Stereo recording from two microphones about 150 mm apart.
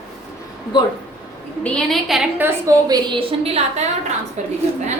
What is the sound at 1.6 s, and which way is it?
Speech, centre (ahead or behind).